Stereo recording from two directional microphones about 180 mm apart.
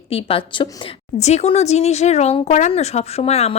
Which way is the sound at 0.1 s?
30° left (ahead or behind).